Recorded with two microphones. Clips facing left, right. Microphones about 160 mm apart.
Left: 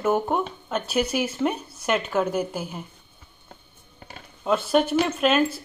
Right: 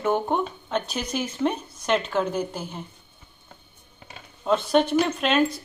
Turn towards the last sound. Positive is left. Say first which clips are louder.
# left 1 dB
turn(degrees=5)  # may be behind; listen again after turning